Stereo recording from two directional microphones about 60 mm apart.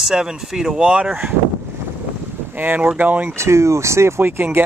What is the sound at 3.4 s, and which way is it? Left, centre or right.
Speech, right.